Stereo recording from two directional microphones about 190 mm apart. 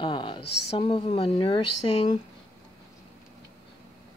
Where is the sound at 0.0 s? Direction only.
25° left (ahead or behind).